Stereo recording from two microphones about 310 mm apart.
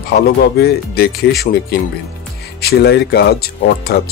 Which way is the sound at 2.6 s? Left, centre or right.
Left.